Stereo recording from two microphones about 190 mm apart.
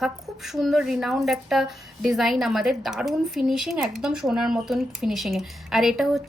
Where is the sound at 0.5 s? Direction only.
Centre (ahead or behind).